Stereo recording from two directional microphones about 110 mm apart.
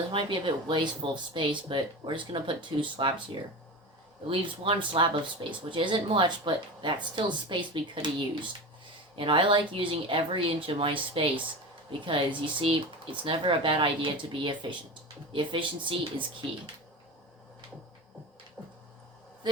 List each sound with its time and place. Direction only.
0.1 s speech: 45° right (ahead or behind)
4.3 s speech: 55° right (ahead or behind)